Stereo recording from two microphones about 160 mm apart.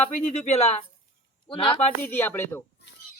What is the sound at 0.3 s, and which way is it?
Speech, 40° left (ahead or behind).